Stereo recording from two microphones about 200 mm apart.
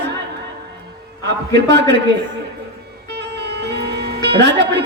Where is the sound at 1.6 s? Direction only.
60° right (ahead or behind).